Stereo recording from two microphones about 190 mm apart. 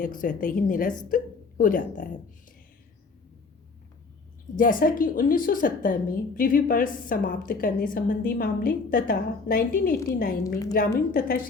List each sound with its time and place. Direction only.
0.0 s a woman's voice: 45° left (ahead or behind)
4.5 s a woman's voice: 45° left (ahead or behind)